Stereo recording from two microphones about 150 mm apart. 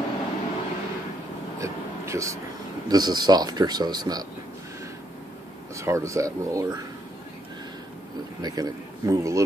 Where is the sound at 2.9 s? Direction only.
30° right (ahead or behind).